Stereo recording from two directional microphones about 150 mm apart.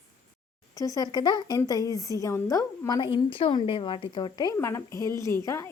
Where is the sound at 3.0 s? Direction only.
35° left (ahead or behind).